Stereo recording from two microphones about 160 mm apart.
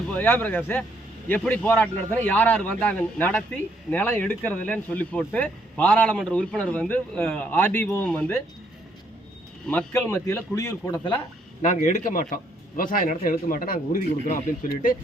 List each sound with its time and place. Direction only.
0.1 s speech: 10° left (ahead or behind)
9.6 s speech: 10° left (ahead or behind)
11.6 s speech: 50° left (ahead or behind)